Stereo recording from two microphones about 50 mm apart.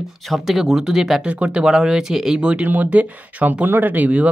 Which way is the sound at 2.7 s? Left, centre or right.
Right.